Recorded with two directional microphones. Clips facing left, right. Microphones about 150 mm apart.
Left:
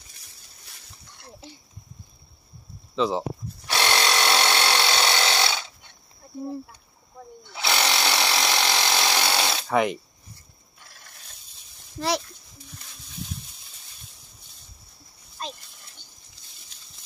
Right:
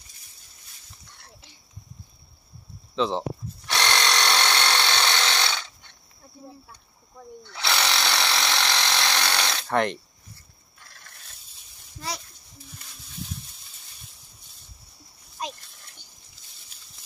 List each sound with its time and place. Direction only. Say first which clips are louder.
3.0 s tools: left 1 dB; 5° left (ahead or behind)
7.4 s drill: left 1 dB; 5° left (ahead or behind)
10.8 s telephone bell ringing: even; 5° left (ahead or behind)
15.4 s a sound: right 2 dB; 10° right (ahead or behind)